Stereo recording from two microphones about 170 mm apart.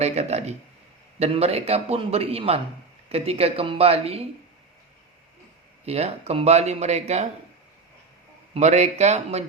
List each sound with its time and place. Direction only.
0.0 s speech: 40° right (ahead or behind)
5.8 s speech: 40° right (ahead or behind)
8.5 s speech: 40° right (ahead or behind)